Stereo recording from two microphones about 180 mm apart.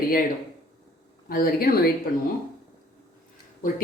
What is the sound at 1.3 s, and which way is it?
Speech, 55° left (ahead or behind).